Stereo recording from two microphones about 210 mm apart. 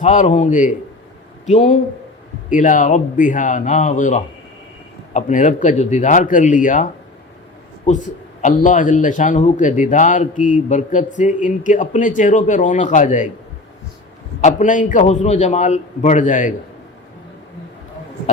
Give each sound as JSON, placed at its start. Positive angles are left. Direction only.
{"t": 0.0, "sound": "a man's voice", "side_deg": 35}
{"t": 7.9, "sound": "a man's voice", "side_deg": 35}
{"t": 14.4, "sound": "a man's voice", "side_deg": 35}